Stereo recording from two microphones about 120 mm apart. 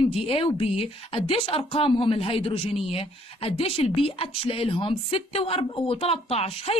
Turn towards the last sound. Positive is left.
turn(degrees=55)  # may be behind; listen again after turning